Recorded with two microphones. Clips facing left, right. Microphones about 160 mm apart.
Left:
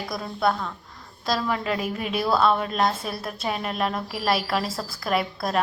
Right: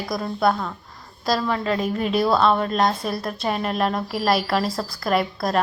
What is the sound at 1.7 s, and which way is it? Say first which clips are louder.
A woman's voice: right 4 dB; 5° left (ahead or behind).